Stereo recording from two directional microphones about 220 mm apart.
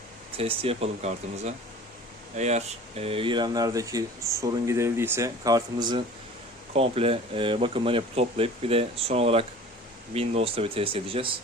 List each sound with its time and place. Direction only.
0.3 s speech: 25° right (ahead or behind)